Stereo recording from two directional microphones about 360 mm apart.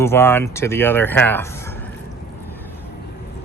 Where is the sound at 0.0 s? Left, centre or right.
Centre.